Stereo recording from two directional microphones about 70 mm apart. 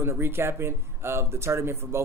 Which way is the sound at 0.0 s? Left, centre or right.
Right.